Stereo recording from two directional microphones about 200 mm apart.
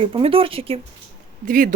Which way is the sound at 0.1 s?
25° right (ahead or behind).